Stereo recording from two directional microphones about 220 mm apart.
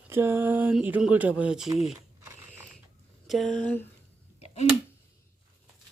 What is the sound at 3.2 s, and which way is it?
Speech, centre (ahead or behind).